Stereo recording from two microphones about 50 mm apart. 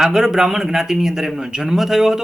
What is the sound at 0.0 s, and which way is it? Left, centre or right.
Speech, centre.